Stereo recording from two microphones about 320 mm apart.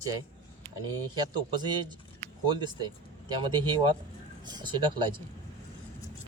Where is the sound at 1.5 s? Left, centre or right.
Centre.